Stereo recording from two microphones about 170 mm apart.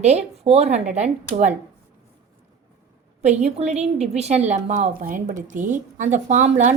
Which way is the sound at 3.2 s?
40° right (ahead or behind).